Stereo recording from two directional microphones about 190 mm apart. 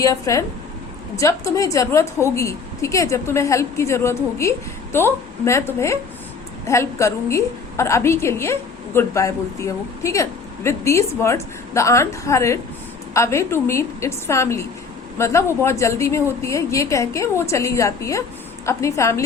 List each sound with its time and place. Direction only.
0.0 s a woman's voice: 15° left (ahead or behind)